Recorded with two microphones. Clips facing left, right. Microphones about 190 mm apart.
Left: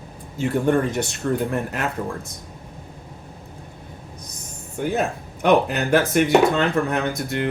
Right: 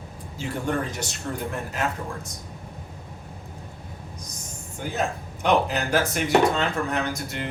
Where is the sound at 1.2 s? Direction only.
90° left.